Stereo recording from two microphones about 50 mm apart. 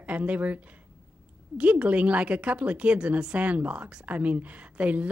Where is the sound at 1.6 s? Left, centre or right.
Right.